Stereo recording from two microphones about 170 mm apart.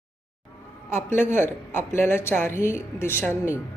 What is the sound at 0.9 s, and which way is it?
A woman's voice, 15° left (ahead or behind).